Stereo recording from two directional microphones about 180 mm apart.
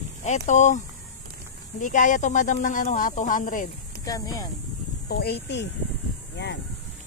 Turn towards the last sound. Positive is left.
turn(degrees=70)  # may be behind; listen again after turning